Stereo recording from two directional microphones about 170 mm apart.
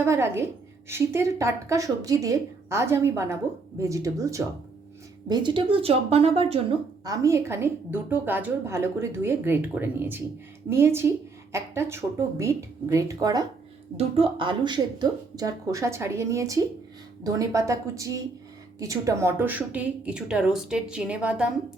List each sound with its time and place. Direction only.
0.0 s a woman's voice: 15° right (ahead or behind); by 6.7 s 35° right (ahead or behind)
7.0 s a woman's voice: 20° right (ahead or behind)
13.9 s a woman's voice: 30° right (ahead or behind); by 21.5 s 5° right (ahead or behind)